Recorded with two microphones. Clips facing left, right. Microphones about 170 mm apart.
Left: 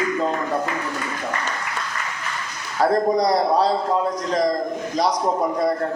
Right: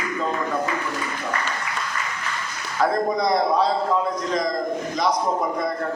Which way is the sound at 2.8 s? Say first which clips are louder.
Left 3 dB; 35° left (ahead or behind).